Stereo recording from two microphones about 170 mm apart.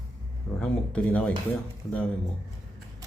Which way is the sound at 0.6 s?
5° left (ahead or behind).